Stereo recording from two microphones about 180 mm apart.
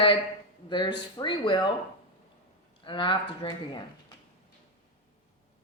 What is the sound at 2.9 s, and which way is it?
Speech, 25° left (ahead or behind).